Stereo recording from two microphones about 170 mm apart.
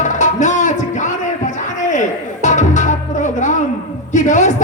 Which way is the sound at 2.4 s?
45° left (ahead or behind).